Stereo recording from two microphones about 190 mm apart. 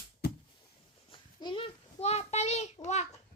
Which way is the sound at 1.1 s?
25° left (ahead or behind).